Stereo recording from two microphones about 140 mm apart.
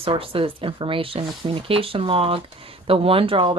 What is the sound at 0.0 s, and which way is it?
Speech, 40° right (ahead or behind).